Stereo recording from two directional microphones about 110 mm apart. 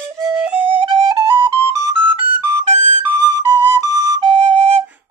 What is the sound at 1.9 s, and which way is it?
Music, 50° right (ahead or behind).